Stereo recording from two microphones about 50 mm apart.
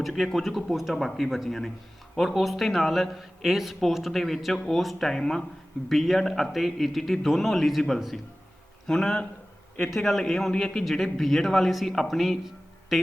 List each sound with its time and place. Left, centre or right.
0.0 s a man's voice: centre
10.5 s a man's voice: centre
10.9 s a man's voice: centre